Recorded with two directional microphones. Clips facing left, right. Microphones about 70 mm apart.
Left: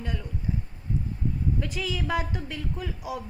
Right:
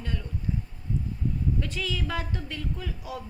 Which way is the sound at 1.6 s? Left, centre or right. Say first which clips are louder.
Left 1 dB; centre.